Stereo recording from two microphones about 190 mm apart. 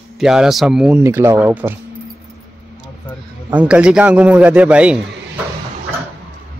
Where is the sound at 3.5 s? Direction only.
5° right (ahead or behind).